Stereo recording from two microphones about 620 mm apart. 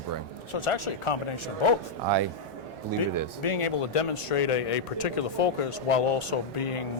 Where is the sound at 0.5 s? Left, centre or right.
Left.